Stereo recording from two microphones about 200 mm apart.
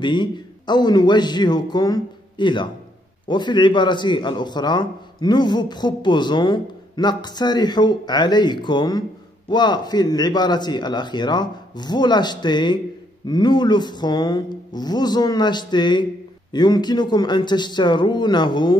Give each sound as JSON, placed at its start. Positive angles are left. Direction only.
{"t": 0.0, "sound": "a man's voice", "side_deg": 20}